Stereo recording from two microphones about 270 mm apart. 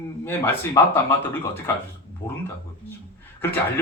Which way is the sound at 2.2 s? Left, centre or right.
Centre.